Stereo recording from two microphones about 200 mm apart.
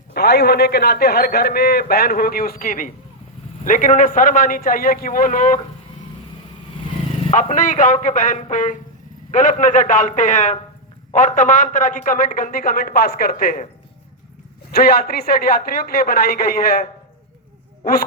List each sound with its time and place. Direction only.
0.1 s a man's voice: 55° left (ahead or behind)
7.3 s a man's voice: 40° left (ahead or behind)
14.7 s a man's voice: 50° left (ahead or behind)